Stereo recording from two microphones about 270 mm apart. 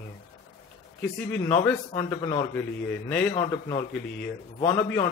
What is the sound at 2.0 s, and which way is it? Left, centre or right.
Speech, centre.